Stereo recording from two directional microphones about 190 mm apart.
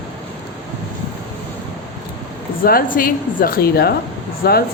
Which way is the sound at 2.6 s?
50° left (ahead or behind).